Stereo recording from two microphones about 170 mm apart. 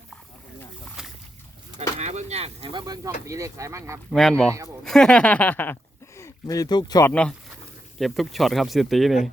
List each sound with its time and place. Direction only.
1.0 s splash: 5° right (ahead or behind)
2.0 s speech: 40° right (ahead or behind); by 4.0 s 15° right (ahead or behind)
4.1 s speech: centre (ahead or behind)
4.9 s a sound: 5° left (ahead or behind)
6.1 s speech: 20° left (ahead or behind)
7.1 s a sound: 5° left (ahead or behind)
7.9 s speech: centre (ahead or behind)